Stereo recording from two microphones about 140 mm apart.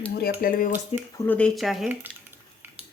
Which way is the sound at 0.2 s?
80° left.